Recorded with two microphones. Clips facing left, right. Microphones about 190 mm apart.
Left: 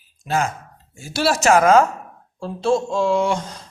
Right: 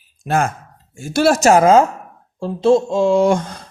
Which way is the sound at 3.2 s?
50° right (ahead or behind).